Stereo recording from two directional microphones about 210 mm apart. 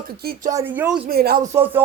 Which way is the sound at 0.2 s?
45° right (ahead or behind).